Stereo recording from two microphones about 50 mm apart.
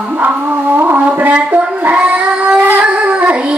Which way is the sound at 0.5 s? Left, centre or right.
Right.